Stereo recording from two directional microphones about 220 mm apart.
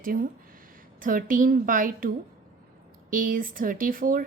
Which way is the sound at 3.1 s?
40° right (ahead or behind).